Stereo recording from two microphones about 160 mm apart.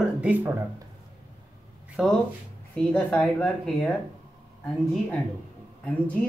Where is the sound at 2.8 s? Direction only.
10° left (ahead or behind).